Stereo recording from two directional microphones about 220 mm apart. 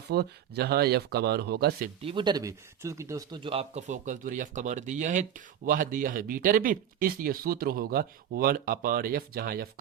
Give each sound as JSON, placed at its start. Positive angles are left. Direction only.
{"t": 0.1, "sound": "speech", "side_deg": -45}
{"t": 2.0, "sound": "speech", "side_deg": -25}